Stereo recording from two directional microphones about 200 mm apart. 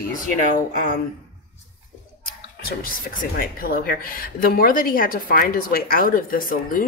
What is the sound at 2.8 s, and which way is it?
Speech, 45° left (ahead or behind).